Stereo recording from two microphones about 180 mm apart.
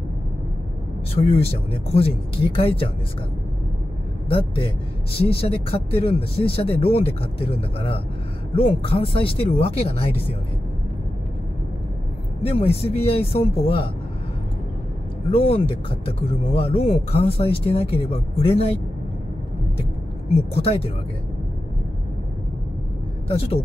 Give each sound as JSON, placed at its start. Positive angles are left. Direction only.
{"t": 1.3, "sound": "speech", "side_deg": 35}
{"t": 5.1, "sound": "speech", "side_deg": 30}
{"t": 12.4, "sound": "speech", "side_deg": 35}
{"t": 15.3, "sound": "speech", "side_deg": 35}
{"t": 20.2, "sound": "speech", "side_deg": 35}
{"t": 23.2, "sound": "a woman's voice", "side_deg": 35}